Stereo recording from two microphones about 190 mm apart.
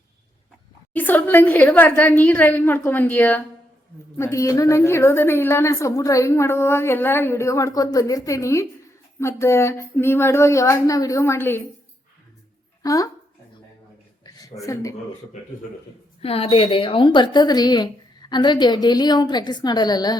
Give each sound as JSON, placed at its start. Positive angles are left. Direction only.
{"t": 0.9, "sound": "a woman's voice", "side_deg": 10}
{"t": 12.8, "sound": "speech", "side_deg": 20}
{"t": 14.3, "sound": "a sound", "side_deg": 20}
{"t": 14.6, "sound": "a woman's voice", "side_deg": 15}
{"t": 16.2, "sound": "a woman's voice", "side_deg": 30}